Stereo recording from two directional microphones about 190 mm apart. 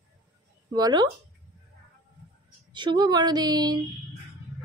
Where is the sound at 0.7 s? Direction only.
20° right (ahead or behind).